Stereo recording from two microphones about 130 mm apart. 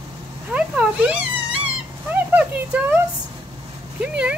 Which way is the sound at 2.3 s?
10° right (ahead or behind).